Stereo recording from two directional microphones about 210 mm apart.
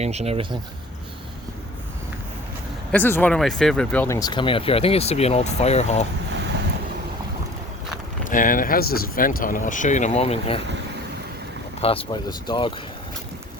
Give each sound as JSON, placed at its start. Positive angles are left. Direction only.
{"t": 0.0, "sound": "speech", "side_deg": -30}
{"t": 2.9, "sound": "speech", "side_deg": 10}
{"t": 8.2, "sound": "speech", "side_deg": 40}
{"t": 11.8, "sound": "speech", "side_deg": 25}